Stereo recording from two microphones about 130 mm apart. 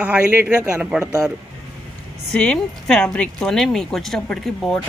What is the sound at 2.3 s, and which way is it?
Speech, 5° left (ahead or behind).